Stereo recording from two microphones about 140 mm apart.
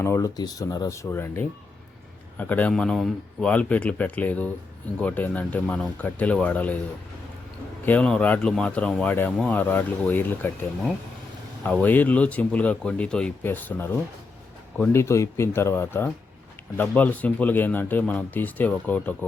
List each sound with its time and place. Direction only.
0.0 s speech: 20° left (ahead or behind)
7.9 s speech: 10° left (ahead or behind)
11.6 s speech: 10° left (ahead or behind)